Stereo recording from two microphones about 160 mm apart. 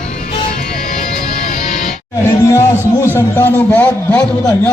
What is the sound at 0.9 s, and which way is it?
Music, 50° left (ahead or behind).